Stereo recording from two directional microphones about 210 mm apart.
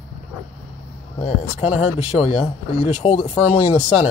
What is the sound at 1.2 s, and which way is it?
Speech, 30° left (ahead or behind).